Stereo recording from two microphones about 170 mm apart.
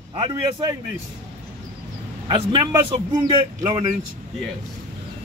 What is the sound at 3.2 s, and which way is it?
Speech, 25° right (ahead or behind).